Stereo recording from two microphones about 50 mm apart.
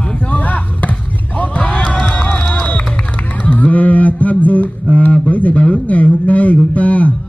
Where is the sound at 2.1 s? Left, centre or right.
Left.